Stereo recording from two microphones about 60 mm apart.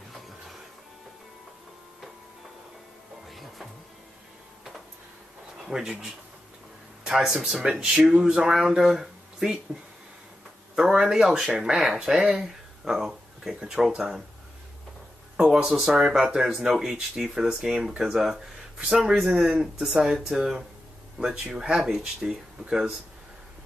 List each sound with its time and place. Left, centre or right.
3.3 s music: centre
5.7 s speech: centre
7.6 s speech: centre
8.8 s a sound: centre
10.8 s speech: centre
15.3 s speech: centre
19.6 s speech: centre